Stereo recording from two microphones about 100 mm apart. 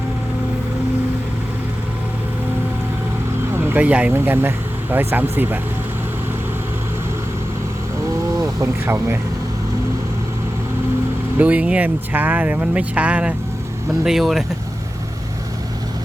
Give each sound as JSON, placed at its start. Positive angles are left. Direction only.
{"t": 3.5, "sound": "speech", "side_deg": -20}
{"t": 8.4, "sound": "speech", "side_deg": -30}
{"t": 11.3, "sound": "speech", "side_deg": -15}
{"t": 14.0, "sound": "speech", "side_deg": -5}